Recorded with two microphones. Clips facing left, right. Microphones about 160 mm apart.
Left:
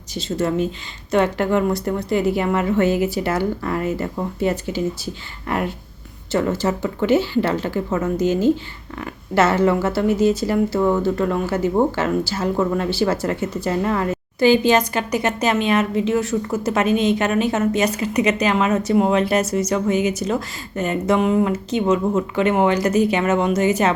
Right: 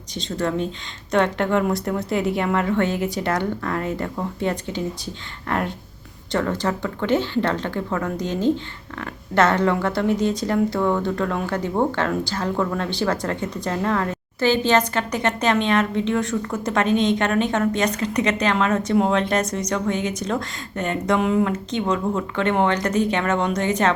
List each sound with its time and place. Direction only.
0.1 s speech: 5° left (ahead or behind)